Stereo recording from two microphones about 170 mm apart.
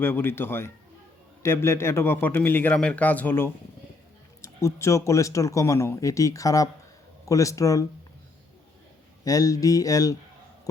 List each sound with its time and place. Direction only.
0.0 s speech: 15° left (ahead or behind)
9.2 s speech: 20° left (ahead or behind)